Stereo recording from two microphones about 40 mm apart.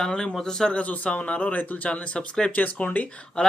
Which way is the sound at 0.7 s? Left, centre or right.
Left.